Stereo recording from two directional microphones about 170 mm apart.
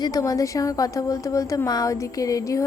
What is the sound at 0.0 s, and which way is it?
Speech, 20° left (ahead or behind).